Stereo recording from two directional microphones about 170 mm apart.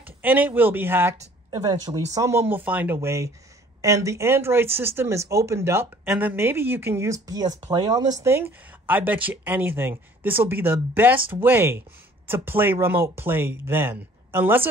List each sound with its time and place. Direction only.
0.0 s speech: 10° right (ahead or behind)